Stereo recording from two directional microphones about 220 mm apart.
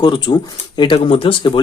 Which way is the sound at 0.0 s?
20° left (ahead or behind).